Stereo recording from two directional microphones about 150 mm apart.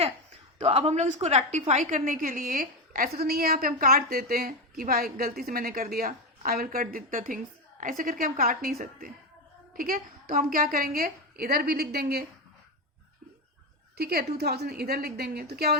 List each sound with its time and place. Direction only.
0.6 s a woman's voice: 45° right (ahead or behind); by 8.7 s 75° right (ahead or behind)
8.8 s speech: 65° right (ahead or behind)
9.7 s a woman's voice: 75° right (ahead or behind); by 12.2 s 90° right
13.9 s a woman's voice: 90° right